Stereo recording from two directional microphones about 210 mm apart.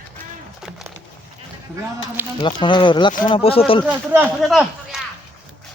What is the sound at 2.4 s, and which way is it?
Speech, 25° left (ahead or behind).